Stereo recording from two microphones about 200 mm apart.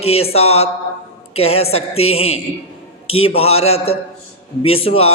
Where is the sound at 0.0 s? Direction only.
30° left (ahead or behind).